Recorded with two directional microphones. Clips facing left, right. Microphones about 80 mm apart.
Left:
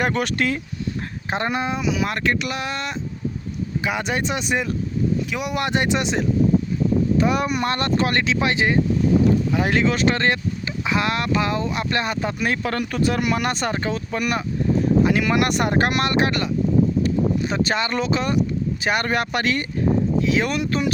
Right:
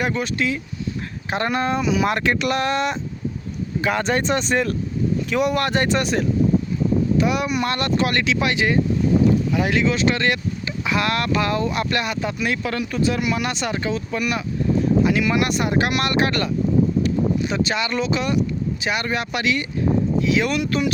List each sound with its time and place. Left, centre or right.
0.0 s speech: left
1.3 s speech: left
1.6 s speech: centre
3.8 s speech: centre
5.5 s speech: centre
7.2 s speech: left
15.7 s speech: left
17.5 s speech: left